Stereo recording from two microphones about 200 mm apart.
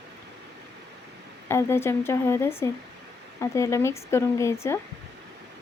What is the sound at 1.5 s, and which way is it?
Speech, 15° left (ahead or behind).